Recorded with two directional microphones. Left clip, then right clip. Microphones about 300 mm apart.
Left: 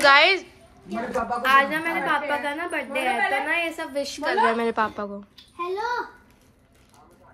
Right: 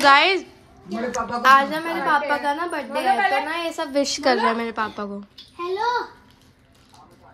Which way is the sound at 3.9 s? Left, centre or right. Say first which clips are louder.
Right 6 dB; right.